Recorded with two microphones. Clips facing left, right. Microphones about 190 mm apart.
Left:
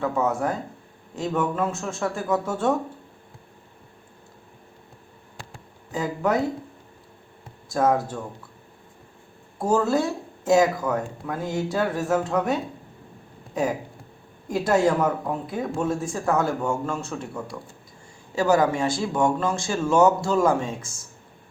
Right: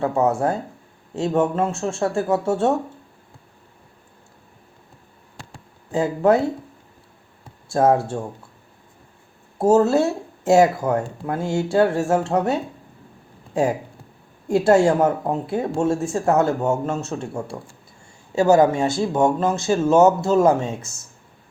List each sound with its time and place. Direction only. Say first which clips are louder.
0.0 s speech: right 4 dB; 30° right (ahead or behind)
5.9 s speech: right 6 dB; 30° right (ahead or behind)
7.7 s speech: right 4 dB; 30° right (ahead or behind)
9.6 s speech: right 6 dB; 25° right (ahead or behind)
13.5 s speech: right 4 dB; 30° right (ahead or behind)